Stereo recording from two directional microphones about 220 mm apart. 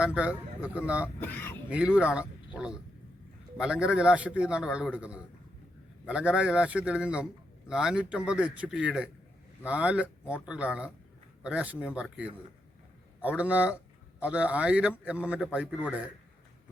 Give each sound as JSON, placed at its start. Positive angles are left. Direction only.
{"t": 0.0, "sound": "speech", "side_deg": -5}
{"t": 1.0, "sound": "speech", "side_deg": 10}
{"t": 1.7, "sound": "speech", "side_deg": -5}